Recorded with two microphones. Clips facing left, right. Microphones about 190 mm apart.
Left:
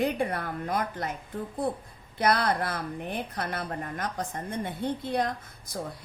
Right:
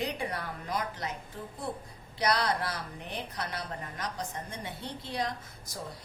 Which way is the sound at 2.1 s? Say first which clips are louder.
Left 4 dB; 50° left (ahead or behind).